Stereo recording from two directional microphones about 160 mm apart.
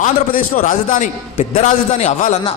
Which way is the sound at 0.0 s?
60° left (ahead or behind).